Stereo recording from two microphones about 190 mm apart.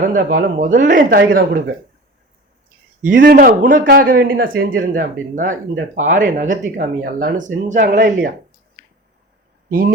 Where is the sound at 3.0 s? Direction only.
45° right (ahead or behind).